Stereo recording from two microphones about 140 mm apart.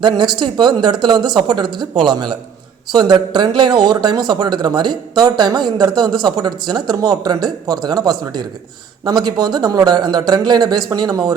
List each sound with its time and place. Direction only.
0.0 s speech: 35° right (ahead or behind)
9.5 s speech: 30° right (ahead or behind)